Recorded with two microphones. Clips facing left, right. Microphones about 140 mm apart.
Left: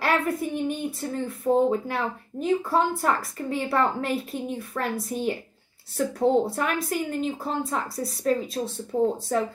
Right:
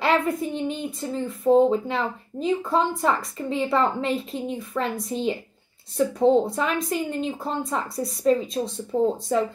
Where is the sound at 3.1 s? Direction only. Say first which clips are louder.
Right 1 dB; 5° left (ahead or behind).